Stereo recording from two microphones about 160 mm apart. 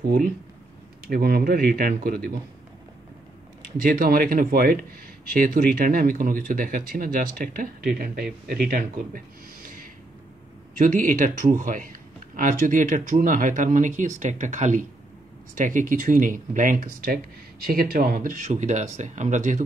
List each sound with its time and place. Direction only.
1.0 s speech: 70° right (ahead or behind)
4.0 s speech: 65° right (ahead or behind)
10.8 s speech: 55° right (ahead or behind)